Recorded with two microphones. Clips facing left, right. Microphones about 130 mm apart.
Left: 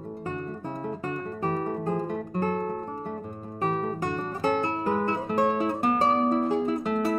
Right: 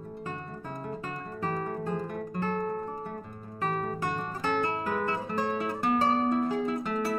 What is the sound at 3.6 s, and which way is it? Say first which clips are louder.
Music: left 3 dB; 25° left (ahead or behind).